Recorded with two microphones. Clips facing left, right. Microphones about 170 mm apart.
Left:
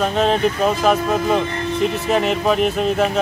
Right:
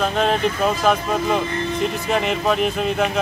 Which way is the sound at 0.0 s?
5° left (ahead or behind).